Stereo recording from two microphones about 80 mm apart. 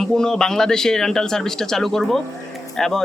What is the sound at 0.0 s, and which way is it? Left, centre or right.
Speech, centre.